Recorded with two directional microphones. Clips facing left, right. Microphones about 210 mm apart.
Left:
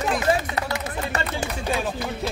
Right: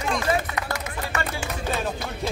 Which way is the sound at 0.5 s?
30° left (ahead or behind).